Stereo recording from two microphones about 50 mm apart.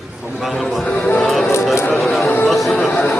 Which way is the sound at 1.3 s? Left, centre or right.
Centre.